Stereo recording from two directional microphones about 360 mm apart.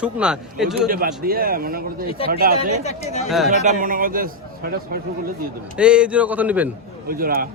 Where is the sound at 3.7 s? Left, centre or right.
Right.